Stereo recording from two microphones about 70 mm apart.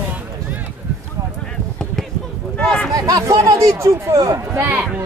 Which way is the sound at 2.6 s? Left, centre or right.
Centre.